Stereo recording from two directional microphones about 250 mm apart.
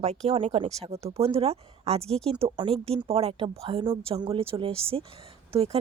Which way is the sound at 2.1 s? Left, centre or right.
Centre.